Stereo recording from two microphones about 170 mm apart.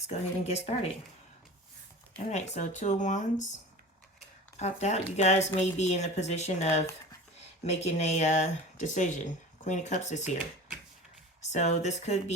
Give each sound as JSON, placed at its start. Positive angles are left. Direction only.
{"t": 0.1, "sound": "speech", "side_deg": 40}
{"t": 2.3, "sound": "speech", "side_deg": 45}
{"t": 4.6, "sound": "speech", "side_deg": 40}
{"t": 11.4, "sound": "speech", "side_deg": 40}